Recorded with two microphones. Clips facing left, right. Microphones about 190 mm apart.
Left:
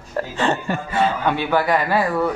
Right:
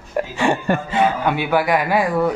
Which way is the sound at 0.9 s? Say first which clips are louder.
Left 1 dB; 15° right (ahead or behind).